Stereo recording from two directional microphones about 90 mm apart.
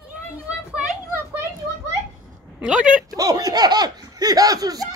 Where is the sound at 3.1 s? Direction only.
45° right (ahead or behind).